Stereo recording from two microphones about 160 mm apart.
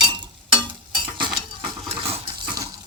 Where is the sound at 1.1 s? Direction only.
30° right (ahead or behind).